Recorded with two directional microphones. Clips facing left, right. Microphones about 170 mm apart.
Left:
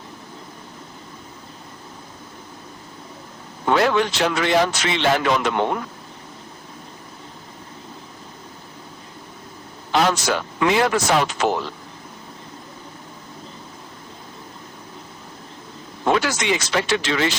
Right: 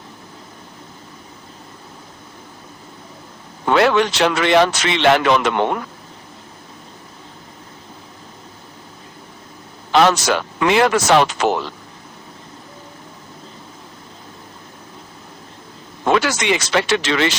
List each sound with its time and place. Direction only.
3.8 s a man's voice: 80° right
9.9 s a man's voice: 80° right
16.1 s a man's voice: 80° right